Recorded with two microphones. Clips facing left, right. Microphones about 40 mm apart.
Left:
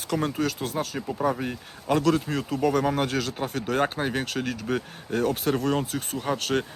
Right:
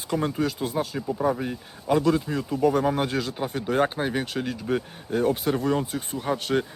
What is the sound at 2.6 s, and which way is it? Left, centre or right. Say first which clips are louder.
Speech: right 2 dB; centre.